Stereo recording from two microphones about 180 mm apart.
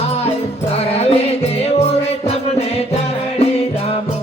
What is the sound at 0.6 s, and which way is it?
Music, 35° left (ahead or behind).